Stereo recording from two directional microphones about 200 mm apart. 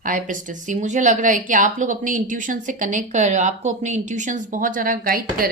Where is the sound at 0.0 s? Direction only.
40° right (ahead or behind).